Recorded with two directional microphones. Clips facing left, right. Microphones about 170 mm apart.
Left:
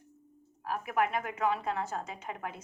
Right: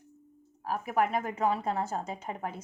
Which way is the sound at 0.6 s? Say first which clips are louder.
Right 2 dB; 35° right (ahead or behind).